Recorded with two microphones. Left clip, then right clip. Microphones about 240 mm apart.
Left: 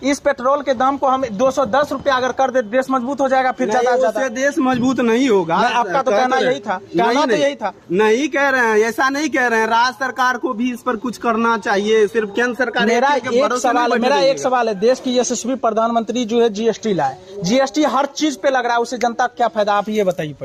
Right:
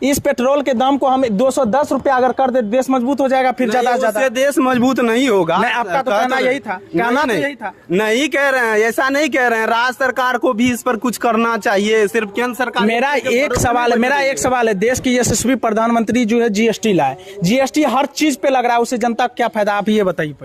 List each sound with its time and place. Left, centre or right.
0.0 s speech: right
5.9 s a man's voice: centre
7.9 s speech: right